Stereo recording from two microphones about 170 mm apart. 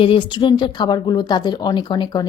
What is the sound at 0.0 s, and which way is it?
A woman's voice, 30° left (ahead or behind).